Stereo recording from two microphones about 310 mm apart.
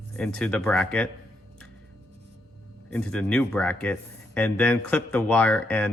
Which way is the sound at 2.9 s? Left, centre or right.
Centre.